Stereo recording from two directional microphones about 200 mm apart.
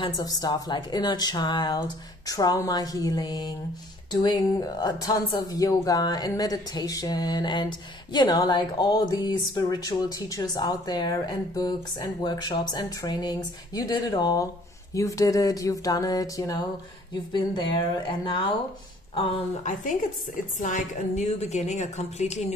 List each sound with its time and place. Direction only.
0.0 s speech: 20° left (ahead or behind)
19.6 s a woman's voice: 40° left (ahead or behind)